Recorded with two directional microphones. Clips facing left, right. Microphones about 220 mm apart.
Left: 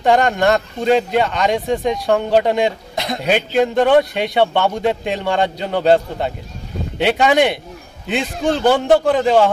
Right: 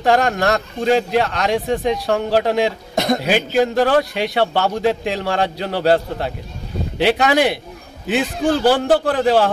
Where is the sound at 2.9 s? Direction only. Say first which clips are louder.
Right 6 dB; 45° right (ahead or behind).